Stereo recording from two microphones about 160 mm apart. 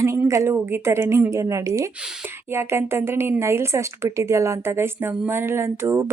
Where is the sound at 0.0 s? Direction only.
15° right (ahead or behind).